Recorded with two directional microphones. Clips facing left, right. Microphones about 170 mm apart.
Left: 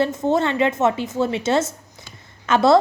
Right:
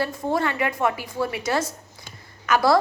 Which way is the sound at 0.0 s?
20° left (ahead or behind).